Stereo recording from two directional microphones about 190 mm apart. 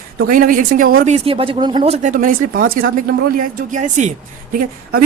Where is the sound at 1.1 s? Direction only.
30° right (ahead or behind).